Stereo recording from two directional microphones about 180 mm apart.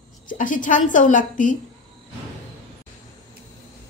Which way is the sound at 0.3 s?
45° left (ahead or behind).